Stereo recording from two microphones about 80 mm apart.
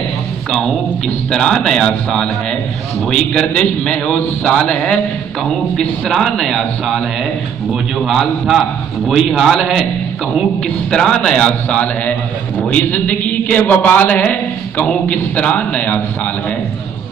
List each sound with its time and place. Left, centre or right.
0.5 s a man's voice: centre
8.1 s a man's voice: centre
10.9 s a man's voice: centre